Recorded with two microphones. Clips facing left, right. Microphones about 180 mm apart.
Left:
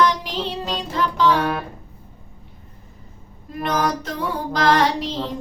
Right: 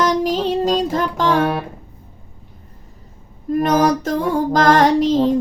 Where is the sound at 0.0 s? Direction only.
45° right (ahead or behind).